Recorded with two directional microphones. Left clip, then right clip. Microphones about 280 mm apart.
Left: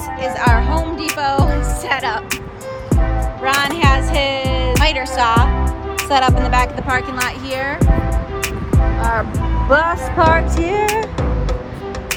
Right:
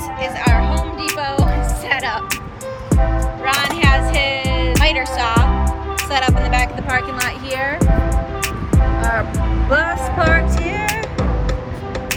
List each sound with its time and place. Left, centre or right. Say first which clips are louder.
0.2 s music: left 3 dB; centre
3.4 s music: left 1 dB; centre
9.6 s music: left 3 dB; centre